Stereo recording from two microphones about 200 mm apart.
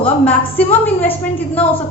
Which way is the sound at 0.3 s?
10° left (ahead or behind).